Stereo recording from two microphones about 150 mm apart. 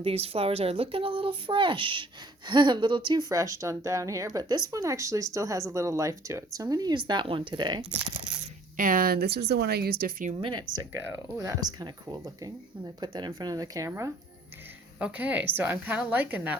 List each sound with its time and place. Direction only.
0.0 s speech: 40° right (ahead or behind)
8.7 s speech: 65° right (ahead or behind)
10.9 s speech: 20° right (ahead or behind)
14.9 s a woman's voice: 10° right (ahead or behind)